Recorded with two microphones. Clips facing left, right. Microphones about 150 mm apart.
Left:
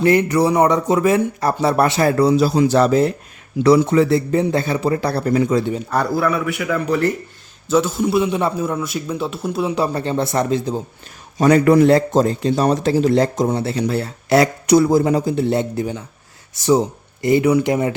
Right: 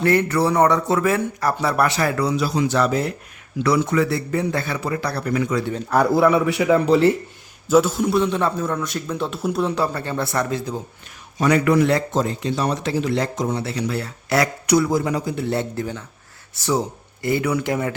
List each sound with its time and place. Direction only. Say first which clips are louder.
0.0 s speech: left 3 dB; 15° left (ahead or behind)
6.1 s speech: right 3 dB; 20° right (ahead or behind)
7.7 s a man's voice: even; centre (ahead or behind); by 10.8 s 20° left (ahead or behind)
11.3 s speech: left 5 dB; 35° left (ahead or behind); by 17.9 s 20° left (ahead or behind)